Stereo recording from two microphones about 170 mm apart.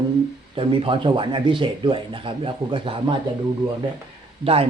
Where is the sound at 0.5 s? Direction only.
30° right (ahead or behind).